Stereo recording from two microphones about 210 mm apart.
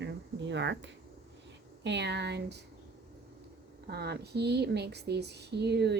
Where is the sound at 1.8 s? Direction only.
55° right (ahead or behind).